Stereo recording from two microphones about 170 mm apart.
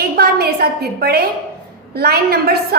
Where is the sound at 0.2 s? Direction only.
65° right (ahead or behind).